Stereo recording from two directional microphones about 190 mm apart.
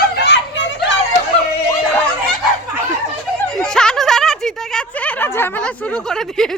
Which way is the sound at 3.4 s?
5° left (ahead or behind).